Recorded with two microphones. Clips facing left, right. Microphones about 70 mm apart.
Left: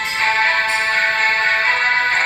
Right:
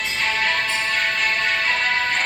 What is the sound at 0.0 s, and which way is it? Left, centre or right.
Music, left.